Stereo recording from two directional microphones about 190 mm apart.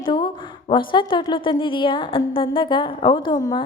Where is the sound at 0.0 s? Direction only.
25° left (ahead or behind).